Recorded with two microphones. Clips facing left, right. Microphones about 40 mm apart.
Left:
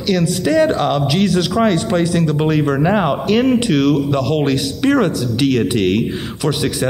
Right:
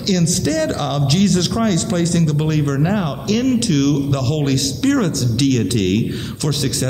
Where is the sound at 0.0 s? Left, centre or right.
Centre.